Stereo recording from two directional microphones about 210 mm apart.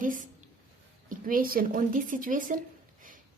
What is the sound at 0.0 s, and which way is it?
Speech, 40° right (ahead or behind).